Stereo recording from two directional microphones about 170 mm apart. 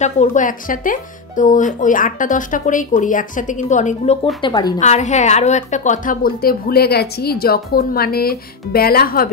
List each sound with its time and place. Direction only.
0.0 s a woman's voice: 45° left (ahead or behind)
4.4 s a woman's voice: 25° left (ahead or behind)
4.7 s a woman's voice: 45° left (ahead or behind); by 9.3 s 60° left (ahead or behind)